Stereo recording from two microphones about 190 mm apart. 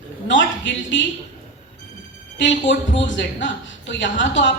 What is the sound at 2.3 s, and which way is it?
Speech, 70° left (ahead or behind).